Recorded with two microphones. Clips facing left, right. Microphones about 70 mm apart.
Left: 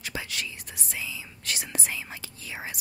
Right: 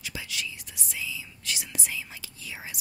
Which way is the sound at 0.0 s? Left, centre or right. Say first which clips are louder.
Left 2 dB; left.